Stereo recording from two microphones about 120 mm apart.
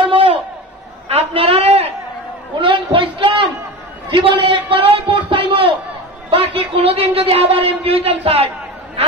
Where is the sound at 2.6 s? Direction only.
45° right (ahead or behind).